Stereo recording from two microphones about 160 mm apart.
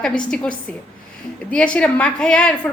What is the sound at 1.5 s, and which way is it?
A woman's voice, 5° left (ahead or behind).